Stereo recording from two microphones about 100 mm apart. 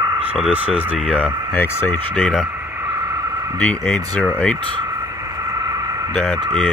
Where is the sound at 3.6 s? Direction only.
15° left (ahead or behind).